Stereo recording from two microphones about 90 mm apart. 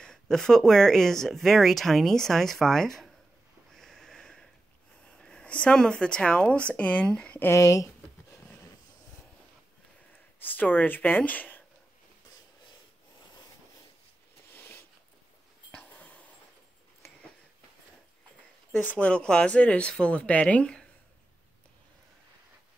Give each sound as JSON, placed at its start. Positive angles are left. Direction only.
{"t": 0.0, "sound": "speech", "side_deg": 5}
{"t": 3.7, "sound": "sniff", "side_deg": 5}
{"t": 5.0, "sound": "speech", "side_deg": 10}
{"t": 7.4, "sound": "a sound", "side_deg": 35}
{"t": 10.4, "sound": "speech", "side_deg": 20}
{"t": 14.5, "sound": "a sound", "side_deg": 25}
{"t": 18.9, "sound": "speech", "side_deg": 15}